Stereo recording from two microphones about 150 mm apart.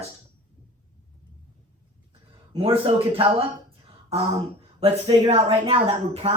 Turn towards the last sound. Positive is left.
turn(degrees=-40)  # may be behind; listen again after turning